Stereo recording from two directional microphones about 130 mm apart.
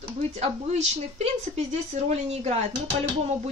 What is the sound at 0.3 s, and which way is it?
A woman's voice, 55° right (ahead or behind).